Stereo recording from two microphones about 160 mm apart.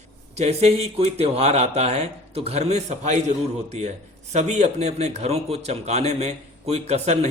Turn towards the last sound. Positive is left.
turn(degrees=-45)  # may be behind; listen again after turning